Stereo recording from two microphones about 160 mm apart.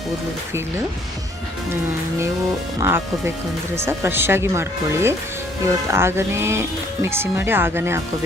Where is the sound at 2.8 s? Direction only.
15° right (ahead or behind).